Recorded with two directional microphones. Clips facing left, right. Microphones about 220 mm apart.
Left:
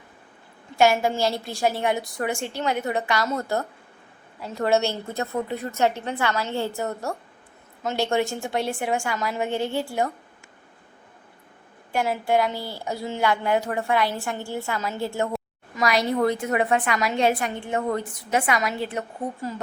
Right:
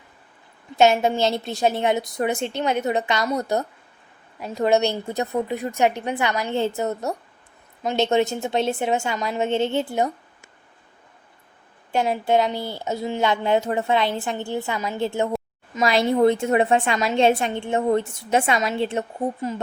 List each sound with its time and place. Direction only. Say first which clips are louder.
0.8 s a woman's voice: right 2 dB; 20° right (ahead or behind)
11.9 s a woman's voice: right 2 dB; 20° right (ahead or behind)